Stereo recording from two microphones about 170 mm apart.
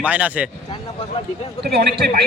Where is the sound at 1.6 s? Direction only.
70° right (ahead or behind).